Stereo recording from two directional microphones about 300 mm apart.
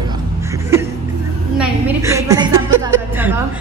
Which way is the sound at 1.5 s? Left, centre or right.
Centre.